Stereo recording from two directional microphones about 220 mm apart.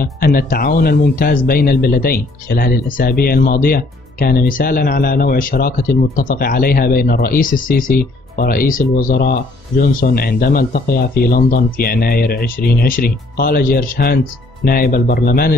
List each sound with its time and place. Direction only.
0.0 s speech: 40° left (ahead or behind)